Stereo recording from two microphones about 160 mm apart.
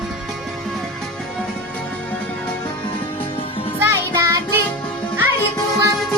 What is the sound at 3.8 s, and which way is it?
Music, 20° right (ahead or behind).